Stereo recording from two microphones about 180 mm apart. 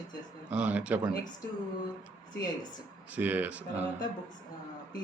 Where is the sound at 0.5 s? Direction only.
5° right (ahead or behind).